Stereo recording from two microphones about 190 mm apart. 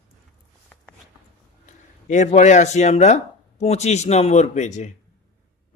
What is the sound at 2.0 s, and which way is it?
A man's voice, 40° left (ahead or behind).